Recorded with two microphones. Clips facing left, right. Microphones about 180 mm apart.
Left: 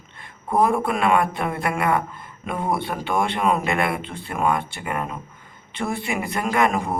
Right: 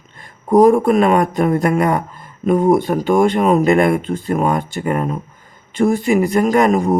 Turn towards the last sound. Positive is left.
turn(degrees=-40)  # may be behind; listen again after turning